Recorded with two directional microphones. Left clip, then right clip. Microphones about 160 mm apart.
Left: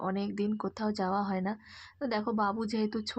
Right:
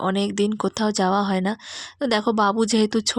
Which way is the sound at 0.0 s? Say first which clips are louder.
Right 11 dB; 45° right (ahead or behind).